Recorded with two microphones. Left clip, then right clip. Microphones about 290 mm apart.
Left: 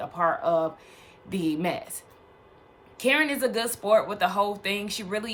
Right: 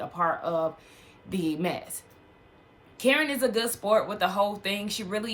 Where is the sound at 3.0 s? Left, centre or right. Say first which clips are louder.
Left 1 dB; centre.